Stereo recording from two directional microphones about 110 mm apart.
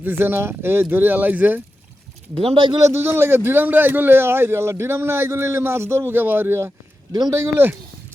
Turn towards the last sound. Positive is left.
turn(degrees=-20)  # may be behind; listen again after turning